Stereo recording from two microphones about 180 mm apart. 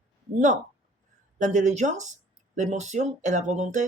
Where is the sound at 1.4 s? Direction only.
40° right (ahead or behind).